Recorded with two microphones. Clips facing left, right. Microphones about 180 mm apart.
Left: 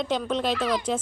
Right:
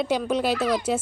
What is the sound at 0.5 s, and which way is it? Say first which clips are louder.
Speech: right 1 dB; 45° right (ahead or behind).